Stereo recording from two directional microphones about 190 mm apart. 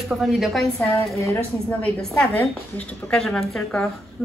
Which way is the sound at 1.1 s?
15° left (ahead or behind).